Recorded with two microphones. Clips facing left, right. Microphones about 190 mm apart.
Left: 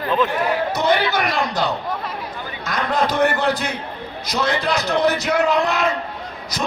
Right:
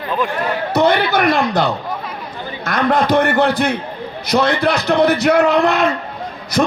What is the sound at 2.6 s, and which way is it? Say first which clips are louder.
Speech: right 6 dB; 60° right (ahead or behind).